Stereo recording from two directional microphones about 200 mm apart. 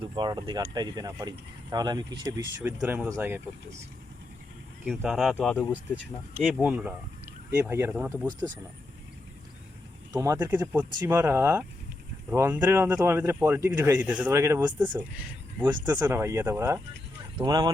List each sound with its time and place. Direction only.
0.2 s speech: 20° right (ahead or behind)
4.9 s speech: centre (ahead or behind)
6.3 s speech: 5° right (ahead or behind)
10.1 s speech: 15° right (ahead or behind)
15.7 s speech: 20° right (ahead or behind)